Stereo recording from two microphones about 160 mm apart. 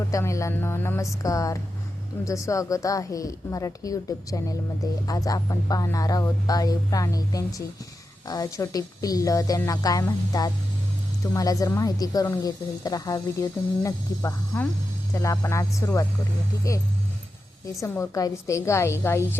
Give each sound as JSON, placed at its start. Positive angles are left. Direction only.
{"t": 0.1, "sound": "a woman's voice", "side_deg": 20}
{"t": 17.7, "sound": "a woman's voice", "side_deg": 15}